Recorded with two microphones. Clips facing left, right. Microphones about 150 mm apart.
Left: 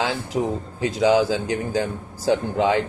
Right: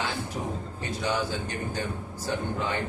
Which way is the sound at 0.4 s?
65° left (ahead or behind).